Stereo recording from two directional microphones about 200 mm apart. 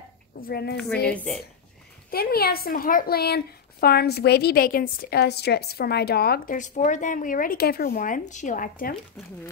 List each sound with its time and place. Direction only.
0.4 s speech: 50° left (ahead or behind)
1.1 s speech: 5° left (ahead or behind)
2.0 s speech: 50° left (ahead or behind)